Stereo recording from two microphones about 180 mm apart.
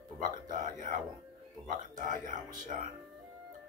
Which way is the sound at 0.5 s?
45° right (ahead or behind).